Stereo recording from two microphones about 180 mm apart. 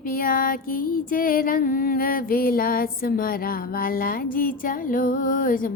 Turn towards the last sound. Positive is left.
turn(degrees=50)  # may be behind; listen again after turning